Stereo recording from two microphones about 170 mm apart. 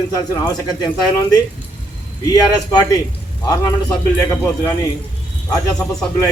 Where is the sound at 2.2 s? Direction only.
25° left (ahead or behind).